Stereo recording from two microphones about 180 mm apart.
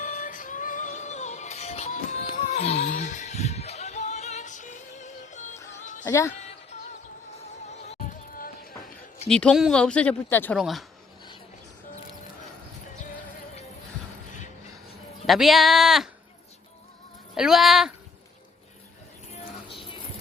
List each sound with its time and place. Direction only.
0.0 s music: 45° left (ahead or behind)
6.1 s a woman's voice: 15° left (ahead or behind)
7.7 s music: 40° left (ahead or behind)
9.3 s speech: 5° left (ahead or behind)
10.6 s speech: centre (ahead or behind)
15.3 s speech: centre (ahead or behind)
17.3 s speech: centre (ahead or behind)
19.3 s music: 30° left (ahead or behind)